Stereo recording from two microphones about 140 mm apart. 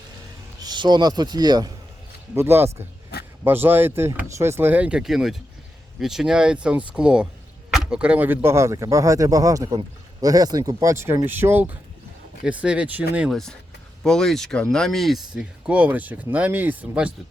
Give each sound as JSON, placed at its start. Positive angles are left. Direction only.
{"t": 0.6, "sound": "speech", "side_deg": -30}
{"t": 2.3, "sound": "speech", "side_deg": -15}
{"t": 13.3, "sound": "speech", "side_deg": 5}